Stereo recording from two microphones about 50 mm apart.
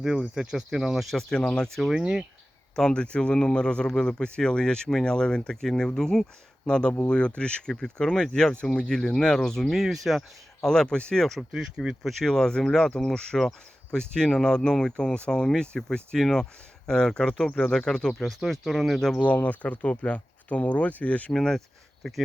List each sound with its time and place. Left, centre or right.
0.0 s speech: centre
1.1 s speech: centre
1.9 s speech: centre
2.7 s speech: centre
10.7 s speech: centre
11.3 s speech: centre
12.2 s speech: centre
18.2 s speech: centre
19.2 s speech: left
21.3 s speech: centre
22.0 s speech: centre